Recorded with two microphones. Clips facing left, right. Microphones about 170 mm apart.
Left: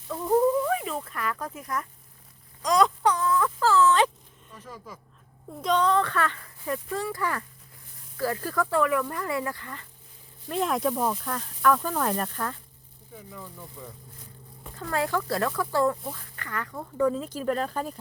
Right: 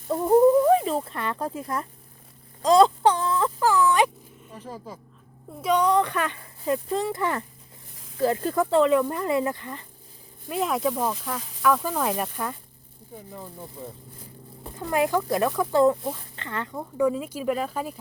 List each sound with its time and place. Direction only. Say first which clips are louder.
0.1 s speech: right 5 dB; 30° right (ahead or behind)
2.6 s a sound: right 5 dB; 30° right (ahead or behind)
3.6 s speech: right 1 dB; 15° right (ahead or behind)
4.5 s speech: right 5 dB; 30° right (ahead or behind)
5.6 s speech: right 2 dB; 10° right (ahead or behind)
10.5 s speech: right 1 dB; centre (ahead or behind)
13.3 s speech: right 3 dB; 35° right (ahead or behind)
14.8 s speech: right 4 dB; 15° right (ahead or behind)
16.7 s speech: right 1 dB; 10° right (ahead or behind)